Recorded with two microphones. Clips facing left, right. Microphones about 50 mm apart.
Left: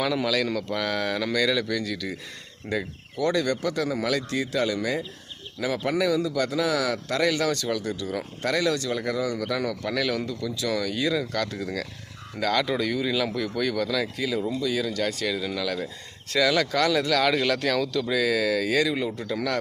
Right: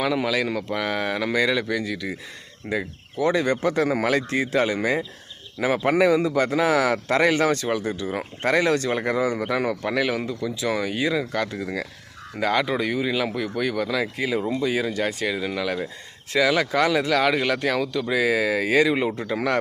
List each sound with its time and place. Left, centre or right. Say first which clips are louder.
0.0 s speech: right 2 dB; centre
14.2 s speech: right 3 dB; right